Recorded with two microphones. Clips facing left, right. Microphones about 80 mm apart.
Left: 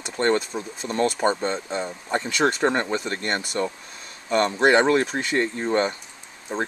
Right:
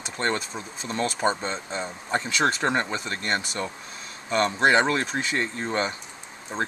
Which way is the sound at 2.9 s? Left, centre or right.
Left.